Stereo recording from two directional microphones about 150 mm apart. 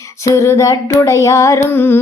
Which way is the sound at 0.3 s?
20° left (ahead or behind).